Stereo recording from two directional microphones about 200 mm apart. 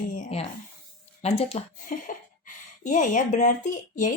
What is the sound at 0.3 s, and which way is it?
Speech, 30° left (ahead or behind).